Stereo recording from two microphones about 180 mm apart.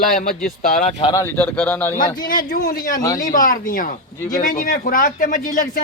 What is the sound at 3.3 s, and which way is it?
Speech, 50° left (ahead or behind).